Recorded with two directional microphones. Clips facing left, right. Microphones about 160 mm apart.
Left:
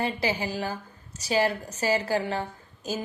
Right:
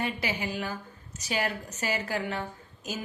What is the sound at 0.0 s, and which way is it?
A woman's voice, 30° left (ahead or behind).